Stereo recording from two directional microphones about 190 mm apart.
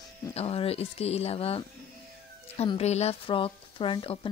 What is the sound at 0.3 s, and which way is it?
A woman's voice, 30° left (ahead or behind).